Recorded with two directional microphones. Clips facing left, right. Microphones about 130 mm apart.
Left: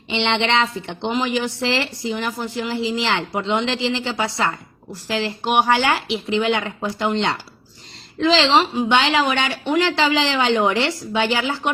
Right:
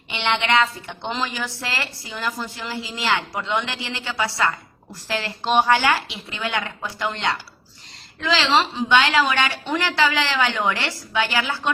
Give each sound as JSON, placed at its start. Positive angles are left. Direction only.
{"t": 0.1, "sound": "speech", "side_deg": 25}